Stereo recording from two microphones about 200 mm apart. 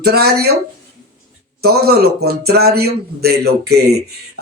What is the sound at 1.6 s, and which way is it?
Speech, 50° right (ahead or behind).